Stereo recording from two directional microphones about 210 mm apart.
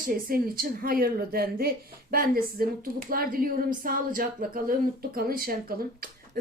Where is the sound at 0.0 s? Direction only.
45° right (ahead or behind).